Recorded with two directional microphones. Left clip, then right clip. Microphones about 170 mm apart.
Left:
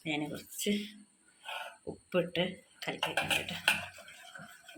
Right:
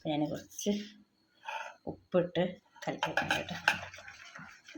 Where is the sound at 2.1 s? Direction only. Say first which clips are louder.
Right 2 dB; 45° right (ahead or behind).